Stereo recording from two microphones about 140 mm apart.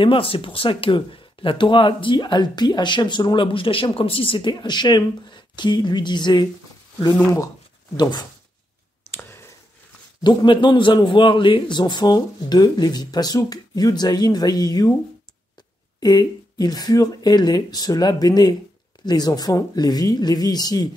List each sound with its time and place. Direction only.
0.0 s speech: 40° left (ahead or behind)
8.0 s speech: 30° left (ahead or behind)
9.1 s a sound: 20° left (ahead or behind)
10.2 s a man's voice: 35° left (ahead or behind)
16.0 s a man's voice: 30° left (ahead or behind)